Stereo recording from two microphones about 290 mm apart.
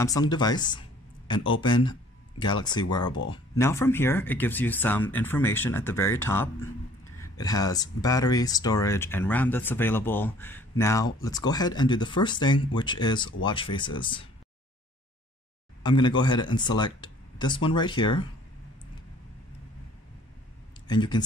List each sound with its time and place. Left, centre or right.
0.0 s speech: centre
15.8 s speech: centre
20.8 s speech: centre